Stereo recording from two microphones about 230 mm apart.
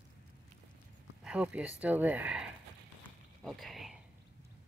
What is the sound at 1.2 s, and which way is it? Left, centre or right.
Speech, centre.